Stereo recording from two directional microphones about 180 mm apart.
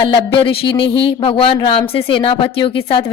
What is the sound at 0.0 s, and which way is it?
Speech, 30° left (ahead or behind).